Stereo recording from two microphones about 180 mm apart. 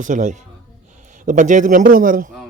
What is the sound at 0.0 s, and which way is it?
A man's voice, 45° right (ahead or behind).